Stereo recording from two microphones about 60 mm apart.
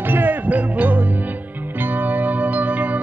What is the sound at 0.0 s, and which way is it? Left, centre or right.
Music, right.